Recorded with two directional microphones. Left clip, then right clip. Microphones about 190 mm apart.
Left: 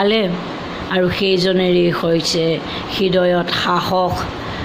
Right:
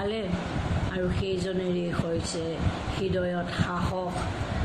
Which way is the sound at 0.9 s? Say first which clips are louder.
Left 16 dB; 50° left (ahead or behind).